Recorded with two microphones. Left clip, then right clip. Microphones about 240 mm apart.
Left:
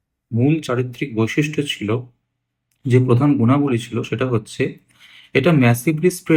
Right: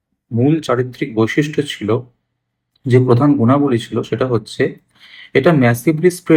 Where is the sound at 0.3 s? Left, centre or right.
Centre.